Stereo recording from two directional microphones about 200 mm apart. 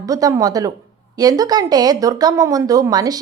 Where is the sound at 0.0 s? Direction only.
15° right (ahead or behind).